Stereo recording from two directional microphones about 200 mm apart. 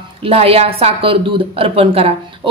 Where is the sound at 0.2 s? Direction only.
30° right (ahead or behind).